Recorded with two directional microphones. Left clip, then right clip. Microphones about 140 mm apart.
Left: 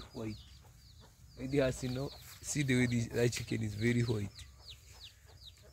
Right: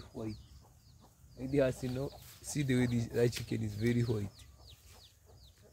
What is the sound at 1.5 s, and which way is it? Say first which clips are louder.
Speech: right 1 dB; 15° left (ahead or behind).